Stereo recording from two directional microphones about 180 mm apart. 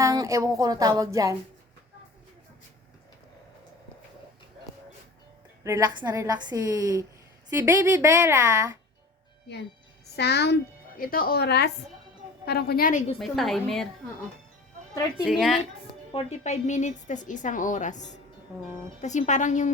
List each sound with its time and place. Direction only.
0.0 s a woman's voice: 20° right (ahead or behind)
5.6 s a woman's voice: 20° right (ahead or behind)
10.2 s a child's voice: 65° left (ahead or behind)
11.0 s a woman's voice: 55° left (ahead or behind)
13.1 s a woman's voice: centre (ahead or behind)
15.2 s a woman's voice: centre (ahead or behind)
16.1 s a woman's voice: 40° left (ahead or behind)